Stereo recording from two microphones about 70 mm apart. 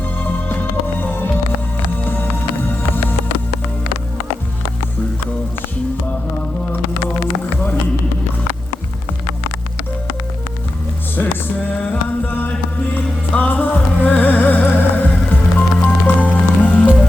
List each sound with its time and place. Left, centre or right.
0.2 s music: left
11.8 s music: left